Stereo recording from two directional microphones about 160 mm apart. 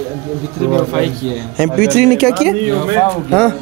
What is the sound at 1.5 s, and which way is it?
Speech, 5° left (ahead or behind).